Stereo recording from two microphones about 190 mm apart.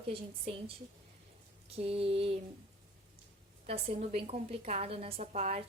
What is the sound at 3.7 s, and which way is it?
Speech, 35° right (ahead or behind).